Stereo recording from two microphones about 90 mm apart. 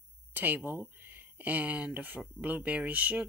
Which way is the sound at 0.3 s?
20° right (ahead or behind).